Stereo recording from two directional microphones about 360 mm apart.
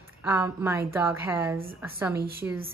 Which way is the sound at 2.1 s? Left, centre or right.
Right.